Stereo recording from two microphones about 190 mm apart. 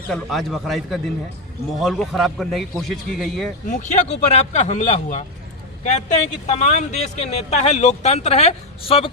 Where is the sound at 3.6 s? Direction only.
40° left (ahead or behind).